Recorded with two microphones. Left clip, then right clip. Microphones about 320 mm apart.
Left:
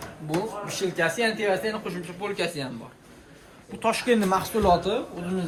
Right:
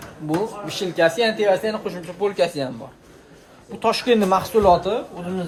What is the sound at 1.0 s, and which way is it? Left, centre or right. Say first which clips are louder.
Speech: right 7 dB; right.